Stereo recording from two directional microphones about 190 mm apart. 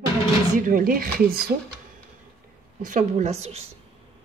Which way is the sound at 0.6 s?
50° right (ahead or behind).